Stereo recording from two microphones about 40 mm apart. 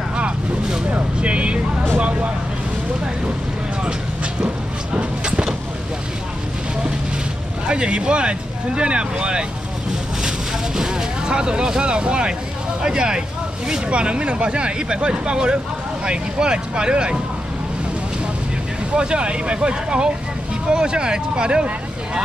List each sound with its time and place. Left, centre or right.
0.1 s vehicle: right
1.2 s speech: right
3.8 s speech: right
4.9 s a sound: right
7.6 s speech: right
10.8 s speech: centre
18.9 s speech: right